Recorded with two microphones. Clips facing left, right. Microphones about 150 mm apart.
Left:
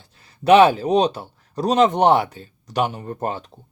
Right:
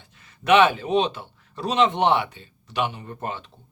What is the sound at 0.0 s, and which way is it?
Speech, 35° left (ahead or behind).